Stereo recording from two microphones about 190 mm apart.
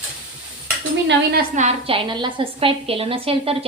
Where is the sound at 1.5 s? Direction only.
35° right (ahead or behind).